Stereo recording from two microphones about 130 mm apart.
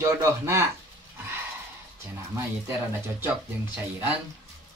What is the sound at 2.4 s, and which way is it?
Speech, 20° right (ahead or behind).